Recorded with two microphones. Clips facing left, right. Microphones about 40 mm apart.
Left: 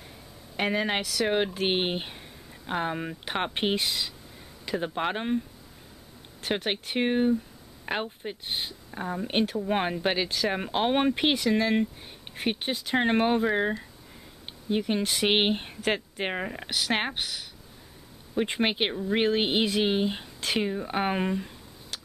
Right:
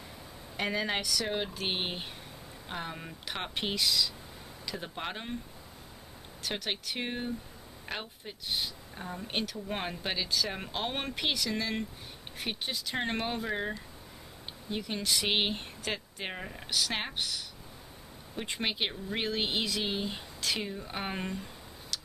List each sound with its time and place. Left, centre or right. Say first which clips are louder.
0.6 s speech: left 5 dB; left
6.4 s speech: left 6 dB; left
14.8 s speech: left 5 dB; left
21.9 s a sound: even; left